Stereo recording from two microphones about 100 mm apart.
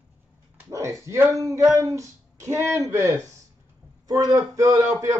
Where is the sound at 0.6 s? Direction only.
30° right (ahead or behind).